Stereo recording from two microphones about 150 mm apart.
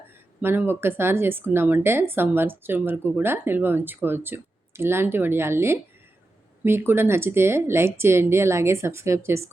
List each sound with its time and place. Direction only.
0.4 s speech: 15° right (ahead or behind)